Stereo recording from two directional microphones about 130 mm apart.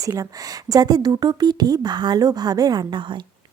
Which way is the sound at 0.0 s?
25° right (ahead or behind).